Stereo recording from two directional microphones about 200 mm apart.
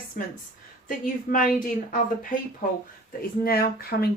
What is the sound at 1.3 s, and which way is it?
Speech, 45° left (ahead or behind).